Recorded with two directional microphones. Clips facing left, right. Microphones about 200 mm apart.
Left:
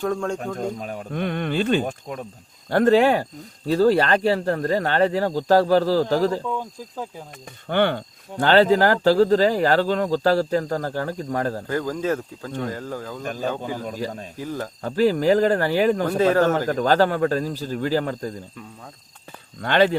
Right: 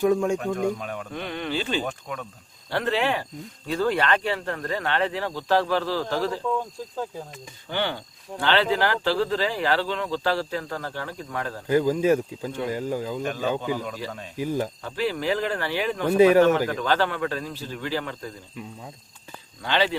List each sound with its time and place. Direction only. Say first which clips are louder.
0.0 s speech: right 3 dB; 10° right (ahead or behind)
0.3 s speech: right 2 dB; 35° left (ahead or behind)
1.1 s speech: left 6 dB; 50° left (ahead or behind)
1.8 s speech: left 3 dB; 30° left (ahead or behind)
2.6 s speech: left 9 dB; 45° left (ahead or behind)
6.5 s speech: right 1 dB; 5° left (ahead or behind)
7.7 s speech: left 7 dB; 55° left (ahead or behind); by 11.6 s 40° left (ahead or behind)
11.7 s speech: right 7 dB; 15° right (ahead or behind)
13.2 s speech: left 2 dB; 40° left (ahead or behind)
14.3 s speech: right 7 dB; 15° right (ahead or behind)
14.8 s speech: left 8 dB; 40° left (ahead or behind)
19.6 s speech: left 6 dB; 50° left (ahead or behind)